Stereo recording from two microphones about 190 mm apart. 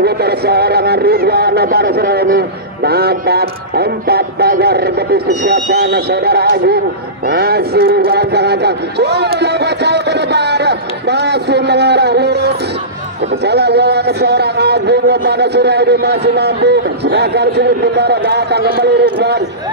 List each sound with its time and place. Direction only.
0.0 s a man's voice: 55° right (ahead or behind)
7.2 s a sound: 55° right (ahead or behind)
13.4 s a man's voice: 60° right (ahead or behind)